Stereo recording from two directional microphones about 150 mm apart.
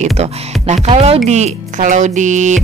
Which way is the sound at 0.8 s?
45° right (ahead or behind).